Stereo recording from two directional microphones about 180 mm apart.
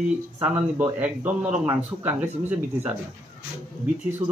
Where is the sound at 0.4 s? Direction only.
10° right (ahead or behind).